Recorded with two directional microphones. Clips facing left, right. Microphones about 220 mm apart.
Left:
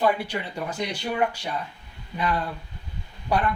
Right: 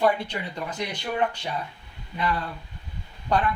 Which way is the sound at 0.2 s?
10° left (ahead or behind).